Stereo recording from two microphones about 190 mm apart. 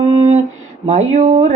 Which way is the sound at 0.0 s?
35° right (ahead or behind).